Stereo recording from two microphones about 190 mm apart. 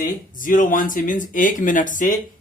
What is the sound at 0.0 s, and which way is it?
Speech, 45° left (ahead or behind).